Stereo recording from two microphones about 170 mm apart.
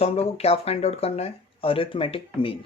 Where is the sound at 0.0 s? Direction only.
35° left (ahead or behind).